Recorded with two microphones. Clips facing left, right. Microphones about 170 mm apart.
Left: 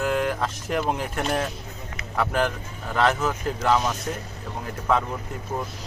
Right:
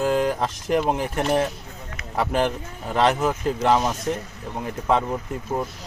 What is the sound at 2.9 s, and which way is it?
A man's voice, 20° right (ahead or behind).